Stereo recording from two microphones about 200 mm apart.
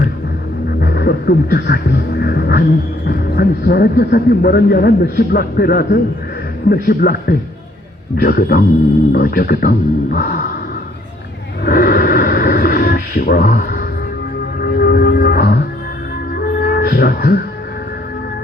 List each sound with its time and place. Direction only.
0.8 s music: 50° left (ahead or behind)
3.1 s a man's voice: 50° left (ahead or behind)
11.6 s a sound: 50° left (ahead or behind)
14.6 s music: 50° left (ahead or behind)